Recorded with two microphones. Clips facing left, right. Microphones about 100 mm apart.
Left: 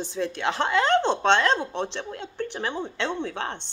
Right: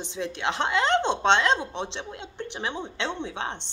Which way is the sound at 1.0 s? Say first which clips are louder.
Left 1 dB; 20° right (ahead or behind).